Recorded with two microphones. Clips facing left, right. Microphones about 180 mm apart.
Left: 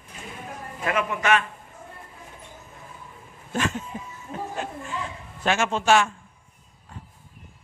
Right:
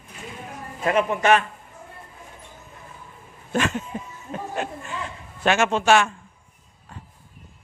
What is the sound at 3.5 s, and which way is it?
A man's voice, 70° right (ahead or behind).